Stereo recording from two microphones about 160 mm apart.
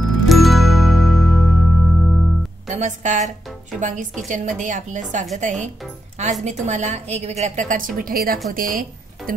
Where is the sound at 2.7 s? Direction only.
50° right (ahead or behind).